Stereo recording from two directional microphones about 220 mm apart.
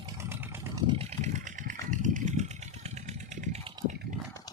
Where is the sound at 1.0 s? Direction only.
35° right (ahead or behind).